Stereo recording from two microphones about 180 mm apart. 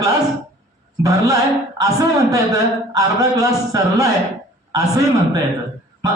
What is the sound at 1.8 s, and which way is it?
A man's voice, 20° right (ahead or behind).